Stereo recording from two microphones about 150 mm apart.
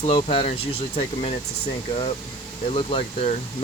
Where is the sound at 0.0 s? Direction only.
40° left (ahead or behind).